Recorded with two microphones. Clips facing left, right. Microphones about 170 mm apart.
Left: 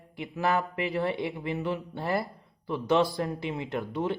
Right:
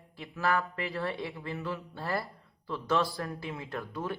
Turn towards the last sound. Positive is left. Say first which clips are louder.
# left 6 dB
turn(degrees=20)  # may be behind; listen again after turning